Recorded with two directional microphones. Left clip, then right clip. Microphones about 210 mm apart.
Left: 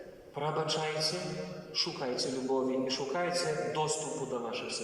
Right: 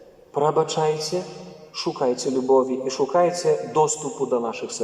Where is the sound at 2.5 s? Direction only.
50° right (ahead or behind).